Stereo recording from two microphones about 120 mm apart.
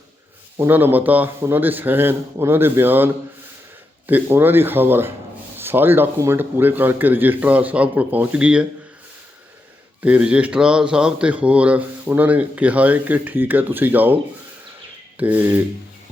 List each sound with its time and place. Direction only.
0.6 s speech: 15° right (ahead or behind)
10.0 s speech: 10° right (ahead or behind)
15.2 s speech: 15° right (ahead or behind)